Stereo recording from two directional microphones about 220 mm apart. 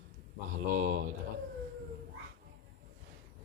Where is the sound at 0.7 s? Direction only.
40° right (ahead or behind).